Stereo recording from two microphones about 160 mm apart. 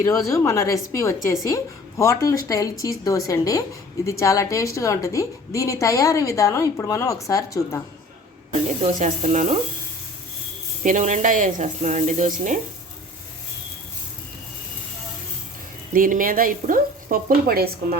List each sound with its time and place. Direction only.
0.0 s a woman's voice: 20° left (ahead or behind)
8.8 s speech: 50° right (ahead or behind)
10.8 s speech: 55° right (ahead or behind)
15.9 s speech: 60° right (ahead or behind)